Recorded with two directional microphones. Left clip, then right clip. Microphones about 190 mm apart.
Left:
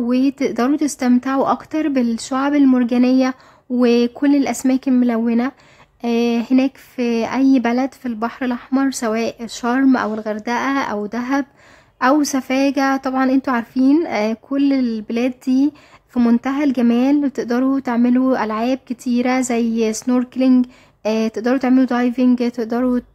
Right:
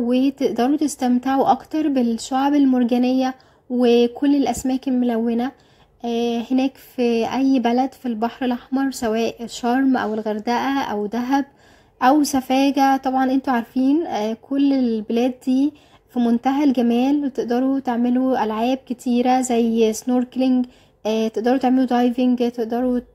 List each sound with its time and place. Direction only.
0.6 s a woman's voice: 5° left (ahead or behind)
16.1 s a woman's voice: 15° left (ahead or behind)
16.4 s a woman's voice: centre (ahead or behind)
17.2 s a woman's voice: 10° left (ahead or behind)
22.6 s speech: 15° left (ahead or behind)